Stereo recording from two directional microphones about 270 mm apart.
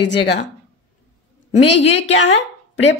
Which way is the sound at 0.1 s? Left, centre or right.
Left.